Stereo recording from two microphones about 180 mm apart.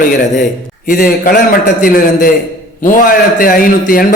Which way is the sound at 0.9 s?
50° left (ahead or behind).